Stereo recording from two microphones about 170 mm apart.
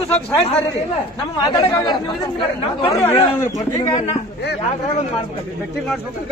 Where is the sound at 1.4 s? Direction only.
20° left (ahead or behind).